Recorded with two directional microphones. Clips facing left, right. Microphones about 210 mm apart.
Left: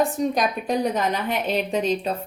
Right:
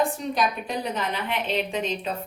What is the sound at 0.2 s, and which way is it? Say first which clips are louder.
A woman's voice: left 4 dB; 45° left (ahead or behind).